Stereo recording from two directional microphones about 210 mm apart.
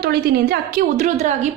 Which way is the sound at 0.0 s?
45° right (ahead or behind).